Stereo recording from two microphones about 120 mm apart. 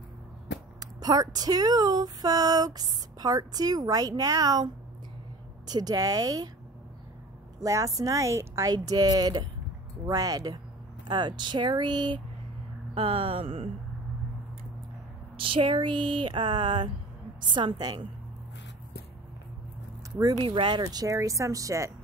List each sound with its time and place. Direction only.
0.7 s speech: 35° right (ahead or behind)
5.7 s speech: 35° right (ahead or behind)
7.6 s speech: 25° right (ahead or behind)
12.9 s speech: 50° right (ahead or behind)
15.3 s speech: 45° right (ahead or behind)
20.3 s speech: 45° right (ahead or behind); by 21.9 s 25° right (ahead or behind)